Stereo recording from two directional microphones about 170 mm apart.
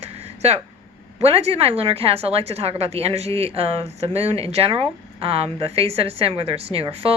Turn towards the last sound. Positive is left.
turn(degrees=-35)  # may be behind; listen again after turning